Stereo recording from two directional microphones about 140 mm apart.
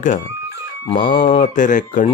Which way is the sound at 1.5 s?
65° left (ahead or behind).